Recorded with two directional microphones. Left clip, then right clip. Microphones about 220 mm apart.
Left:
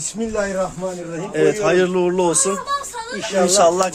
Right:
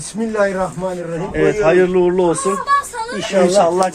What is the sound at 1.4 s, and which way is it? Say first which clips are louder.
A man's voice: right 3 dB; 10° left (ahead or behind).